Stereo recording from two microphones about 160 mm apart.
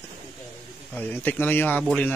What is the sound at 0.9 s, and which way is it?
Speech, 10° left (ahead or behind).